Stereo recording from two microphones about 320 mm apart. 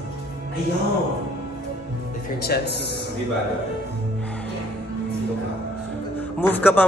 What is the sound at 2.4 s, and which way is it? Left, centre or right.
Speech, left.